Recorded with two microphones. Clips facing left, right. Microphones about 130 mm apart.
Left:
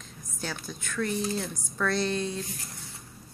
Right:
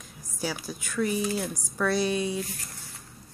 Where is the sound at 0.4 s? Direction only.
10° right (ahead or behind).